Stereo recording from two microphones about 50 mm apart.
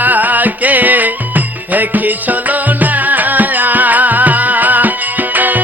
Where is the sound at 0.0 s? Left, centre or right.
Right.